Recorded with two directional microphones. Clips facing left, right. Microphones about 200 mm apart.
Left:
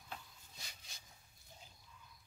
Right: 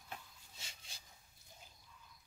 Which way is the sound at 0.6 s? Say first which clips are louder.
Even; 30° right (ahead or behind).